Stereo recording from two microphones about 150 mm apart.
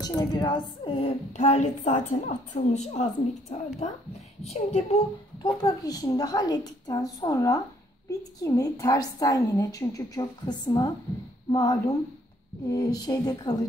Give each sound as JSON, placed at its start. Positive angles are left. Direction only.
{"t": 0.2, "sound": "a woman's voice", "side_deg": 25}
{"t": 5.4, "sound": "a woman's voice", "side_deg": 25}